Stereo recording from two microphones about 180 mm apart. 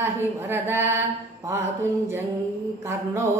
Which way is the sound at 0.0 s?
15° right (ahead or behind).